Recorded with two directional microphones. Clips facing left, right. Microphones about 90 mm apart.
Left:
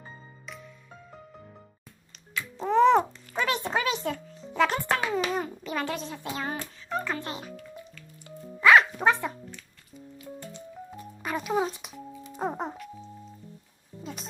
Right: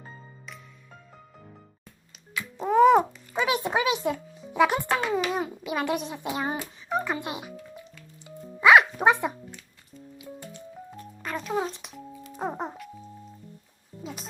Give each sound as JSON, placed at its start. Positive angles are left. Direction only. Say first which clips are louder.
{"t": 2.3, "sound": "a child's voice", "louder": "right 1 dB", "side_deg": -5}
{"t": 8.4, "sound": "music", "louder": "right 1 dB", "side_deg": -5}
{"t": 8.6, "sound": "a sound", "louder": "right 2 dB", "side_deg": -15}
{"t": 10.9, "sound": "music", "louder": "left 2 dB", "side_deg": 5}
{"t": 14.0, "sound": "music", "louder": "right 1 dB", "side_deg": 0}